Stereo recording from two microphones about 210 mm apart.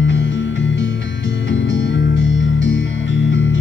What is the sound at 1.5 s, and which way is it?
Music, 60° left (ahead or behind).